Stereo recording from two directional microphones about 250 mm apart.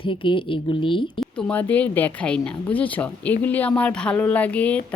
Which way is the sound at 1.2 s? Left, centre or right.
Centre.